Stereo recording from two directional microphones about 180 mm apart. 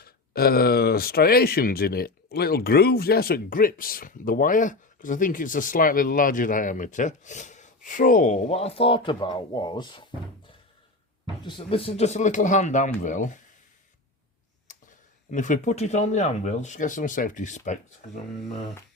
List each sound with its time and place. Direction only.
0.0 s speech: 55° left (ahead or behind); by 10.1 s 25° left (ahead or behind)
11.4 s speech: 30° left (ahead or behind); by 13.4 s 45° left (ahead or behind)
15.3 s speech: 45° left (ahead or behind)